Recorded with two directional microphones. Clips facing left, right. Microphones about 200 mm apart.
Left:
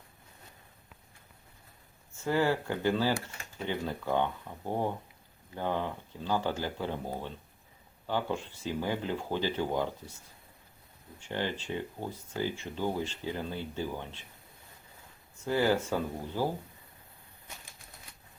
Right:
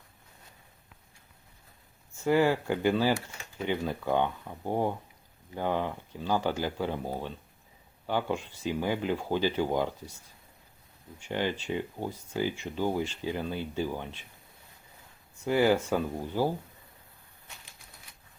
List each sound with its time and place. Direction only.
2.2 s speech: 15° right (ahead or behind)
11.3 s speech: 15° right (ahead or behind)
15.4 s speech: 15° right (ahead or behind)